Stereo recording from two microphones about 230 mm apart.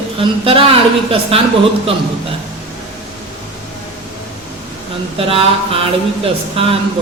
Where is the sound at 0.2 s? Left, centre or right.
Right.